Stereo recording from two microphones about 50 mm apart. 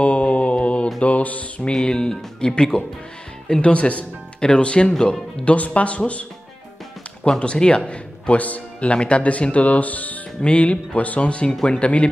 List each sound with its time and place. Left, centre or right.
0.0 s mantra: left
1.0 s music: left
1.7 s speech: centre
5.4 s speech: left
7.2 s speech: centre
11.5 s speech: centre
11.8 s speech: left